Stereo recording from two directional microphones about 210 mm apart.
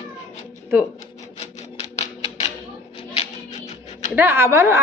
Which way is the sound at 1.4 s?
30° left (ahead or behind).